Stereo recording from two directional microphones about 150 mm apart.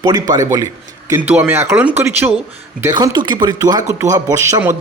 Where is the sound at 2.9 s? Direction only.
25° right (ahead or behind).